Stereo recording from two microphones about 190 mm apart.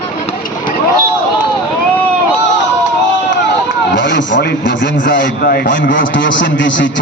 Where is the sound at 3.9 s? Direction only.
70° left (ahead or behind).